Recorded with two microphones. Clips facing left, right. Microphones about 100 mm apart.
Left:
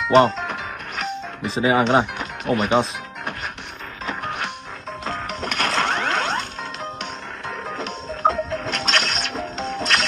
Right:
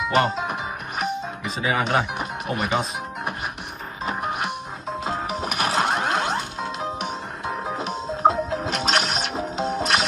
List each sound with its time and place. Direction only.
0.0 s music: 5° right (ahead or behind)
1.5 s speech: 30° left (ahead or behind)
2.1 s music: 5° right (ahead or behind)
4.0 s music: 5° right (ahead or behind)